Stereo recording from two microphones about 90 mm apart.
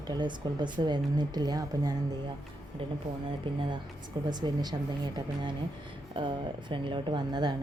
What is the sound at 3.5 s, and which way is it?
Speech, 75° right (ahead or behind).